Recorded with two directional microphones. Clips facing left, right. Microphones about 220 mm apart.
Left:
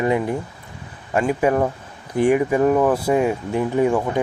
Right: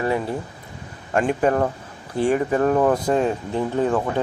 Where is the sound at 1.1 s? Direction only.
5° left (ahead or behind).